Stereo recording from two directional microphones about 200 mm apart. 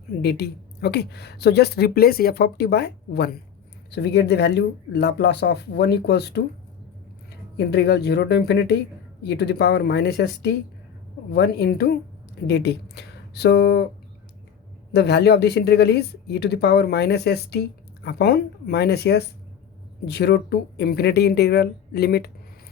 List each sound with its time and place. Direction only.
0.2 s a woman's voice: 55° left (ahead or behind)
7.7 s a woman's voice: 55° left (ahead or behind)
14.9 s speech: 55° left (ahead or behind)